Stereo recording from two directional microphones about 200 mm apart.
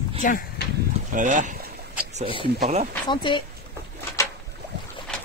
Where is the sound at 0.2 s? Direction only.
40° left (ahead or behind).